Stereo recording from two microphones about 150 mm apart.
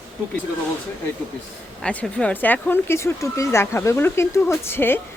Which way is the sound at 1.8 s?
5° left (ahead or behind).